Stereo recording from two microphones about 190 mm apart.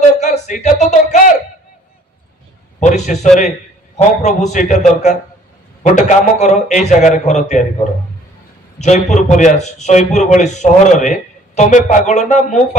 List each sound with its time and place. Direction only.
0.0 s a man's voice: 40° left (ahead or behind)
2.8 s a man's voice: 40° left (ahead or behind)
8.7 s a man's voice: 40° left (ahead or behind)